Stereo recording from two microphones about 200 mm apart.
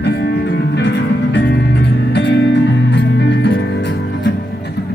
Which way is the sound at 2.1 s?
60° left (ahead or behind).